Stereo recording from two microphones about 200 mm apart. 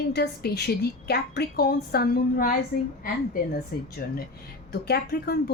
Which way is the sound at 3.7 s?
50° left (ahead or behind).